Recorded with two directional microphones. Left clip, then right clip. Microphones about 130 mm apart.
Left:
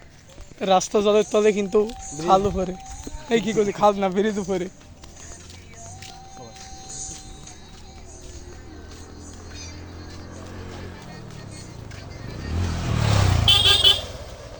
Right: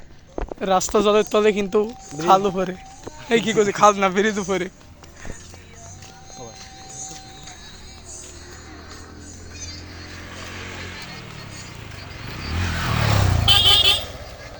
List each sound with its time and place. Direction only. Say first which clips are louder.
0.6 s speech: even; 15° left (ahead or behind)
10.3 s vehicle: right 6 dB; 5° right (ahead or behind)
12.2 s vehicle: right 5 dB; 35° right (ahead or behind)
13.0 s vehicle: even; 40° right (ahead or behind)
13.4 s vehicle: right 1 dB; centre (ahead or behind)